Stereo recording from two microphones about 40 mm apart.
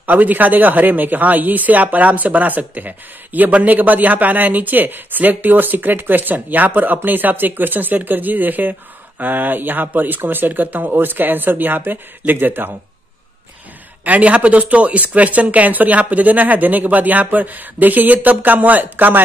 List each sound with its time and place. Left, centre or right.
0.0 s speech: right
14.0 s speech: right